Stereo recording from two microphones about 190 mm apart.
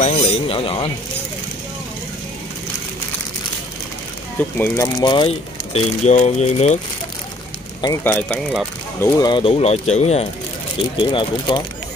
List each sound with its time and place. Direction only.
0.0 s speech: 35° left (ahead or behind)
4.4 s speech: 10° left (ahead or behind); by 6.8 s 35° left (ahead or behind)
7.8 s speech: 15° left (ahead or behind)
9.0 s speech: 20° left (ahead or behind)